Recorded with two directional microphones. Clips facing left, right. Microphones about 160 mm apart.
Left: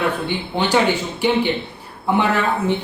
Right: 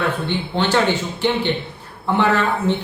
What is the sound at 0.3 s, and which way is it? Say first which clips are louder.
Speech: even; 10° left (ahead or behind).